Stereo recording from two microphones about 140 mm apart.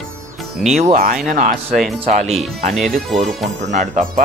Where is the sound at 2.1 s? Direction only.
50° right (ahead or behind).